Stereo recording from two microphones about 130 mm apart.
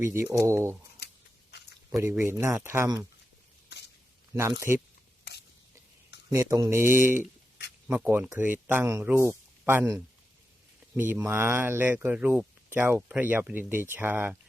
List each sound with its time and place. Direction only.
0.1 s speech: 20° right (ahead or behind)
2.0 s speech: 20° right (ahead or behind)
4.4 s speech: 20° right (ahead or behind)
6.3 s speech: 25° right (ahead or behind)